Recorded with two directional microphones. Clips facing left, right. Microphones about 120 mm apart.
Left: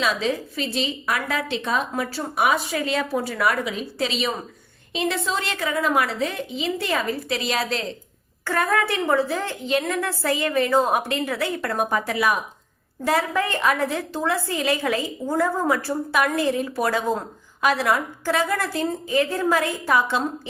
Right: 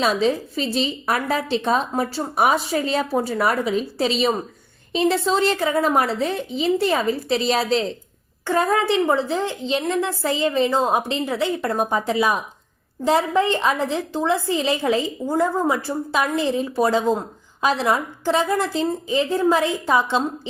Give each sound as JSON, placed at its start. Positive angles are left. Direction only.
{"t": 0.0, "sound": "a woman's voice", "side_deg": -35}